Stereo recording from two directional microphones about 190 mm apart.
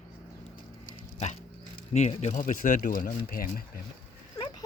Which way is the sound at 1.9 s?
35° left (ahead or behind).